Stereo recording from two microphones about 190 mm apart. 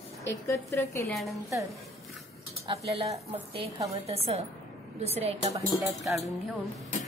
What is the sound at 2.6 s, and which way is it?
A woman's voice, 30° right (ahead or behind).